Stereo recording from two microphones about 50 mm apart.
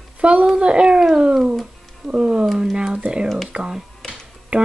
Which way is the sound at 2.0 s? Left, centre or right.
Centre.